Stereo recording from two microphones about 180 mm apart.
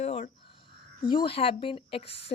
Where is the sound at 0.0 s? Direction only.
40° left (ahead or behind).